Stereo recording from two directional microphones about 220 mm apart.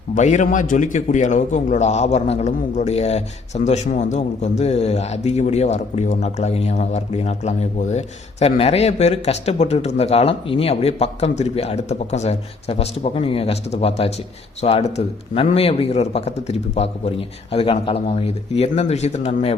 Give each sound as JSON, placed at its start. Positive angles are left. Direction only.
{"t": 0.1, "sound": "a man's voice", "side_deg": 35}